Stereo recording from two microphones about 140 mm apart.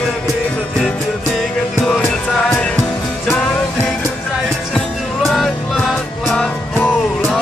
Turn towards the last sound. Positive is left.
turn(degrees=5)  # may be behind; listen again after turning